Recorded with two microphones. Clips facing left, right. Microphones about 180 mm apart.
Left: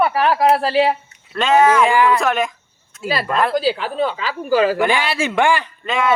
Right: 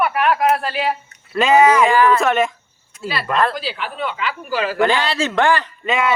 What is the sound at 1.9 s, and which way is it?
Speech, 15° left (ahead or behind).